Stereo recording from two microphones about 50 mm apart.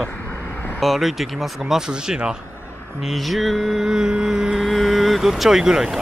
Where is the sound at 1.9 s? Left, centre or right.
Centre.